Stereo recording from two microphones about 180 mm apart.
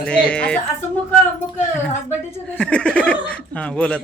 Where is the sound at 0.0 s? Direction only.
5° left (ahead or behind).